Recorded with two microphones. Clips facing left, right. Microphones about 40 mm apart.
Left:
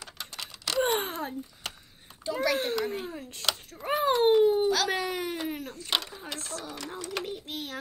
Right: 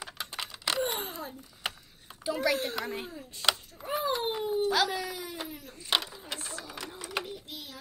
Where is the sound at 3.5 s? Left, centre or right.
Left.